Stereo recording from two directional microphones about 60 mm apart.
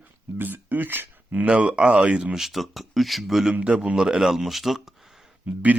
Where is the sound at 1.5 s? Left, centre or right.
Centre.